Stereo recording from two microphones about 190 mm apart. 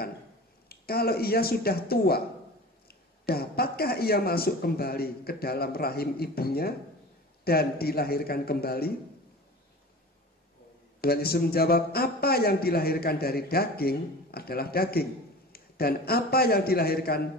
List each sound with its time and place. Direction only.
0.7 s speech: 55° left (ahead or behind)
11.0 s a man's voice: 55° left (ahead or behind)